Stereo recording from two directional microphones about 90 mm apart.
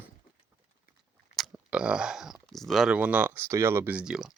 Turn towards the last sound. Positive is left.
turn(degrees=-5)  # may be behind; listen again after turning